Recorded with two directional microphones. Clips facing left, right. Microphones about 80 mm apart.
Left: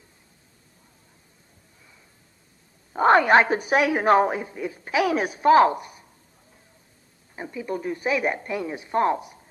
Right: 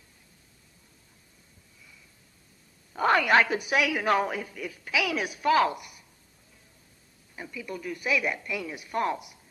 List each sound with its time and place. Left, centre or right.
2.9 s a woman's voice: left
7.3 s a woman's voice: left